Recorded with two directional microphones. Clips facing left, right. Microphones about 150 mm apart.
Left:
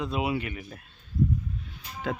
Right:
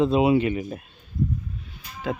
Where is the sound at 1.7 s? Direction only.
5° right (ahead or behind).